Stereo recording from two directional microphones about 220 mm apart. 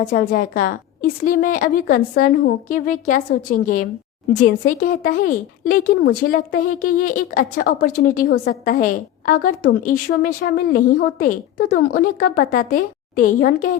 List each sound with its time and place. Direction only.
0.1 s a woman's voice: 40° left (ahead or behind)